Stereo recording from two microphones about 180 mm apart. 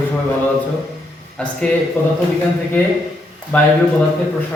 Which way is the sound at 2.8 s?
10° left (ahead or behind).